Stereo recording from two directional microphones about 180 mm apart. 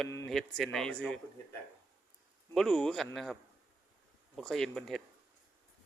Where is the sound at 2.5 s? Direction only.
5° left (ahead or behind).